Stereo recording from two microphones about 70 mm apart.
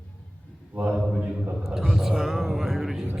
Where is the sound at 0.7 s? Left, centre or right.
Right.